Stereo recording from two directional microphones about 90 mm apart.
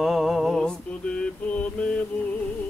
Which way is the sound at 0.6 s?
10° left (ahead or behind).